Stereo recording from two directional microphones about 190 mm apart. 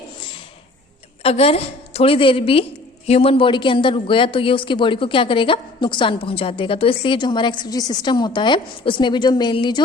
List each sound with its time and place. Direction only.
1.2 s a woman's voice: 30° left (ahead or behind)